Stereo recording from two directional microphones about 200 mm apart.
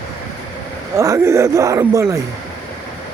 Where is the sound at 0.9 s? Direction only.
15° right (ahead or behind).